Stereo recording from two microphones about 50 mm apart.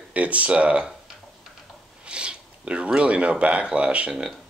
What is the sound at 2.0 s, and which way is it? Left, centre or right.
Speech, right.